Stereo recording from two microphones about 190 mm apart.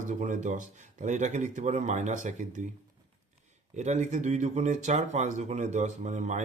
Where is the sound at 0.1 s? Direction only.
40° right (ahead or behind).